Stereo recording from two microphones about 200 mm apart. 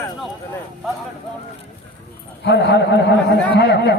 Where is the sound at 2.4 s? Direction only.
60° left (ahead or behind).